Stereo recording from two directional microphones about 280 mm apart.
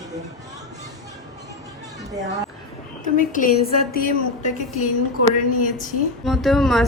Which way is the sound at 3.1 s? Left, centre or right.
Left.